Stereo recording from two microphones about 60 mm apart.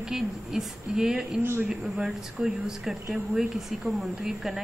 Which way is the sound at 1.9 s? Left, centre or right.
Centre.